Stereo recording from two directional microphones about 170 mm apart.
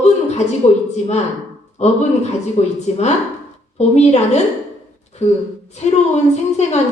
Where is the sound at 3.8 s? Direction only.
40° left (ahead or behind).